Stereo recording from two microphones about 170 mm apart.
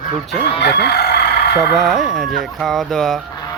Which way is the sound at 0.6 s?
75° left (ahead or behind).